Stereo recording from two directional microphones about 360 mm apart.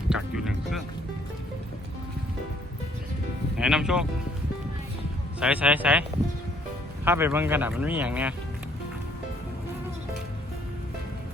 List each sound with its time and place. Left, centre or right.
0.1 s music: centre
3.6 s speech: centre
5.4 s speech: centre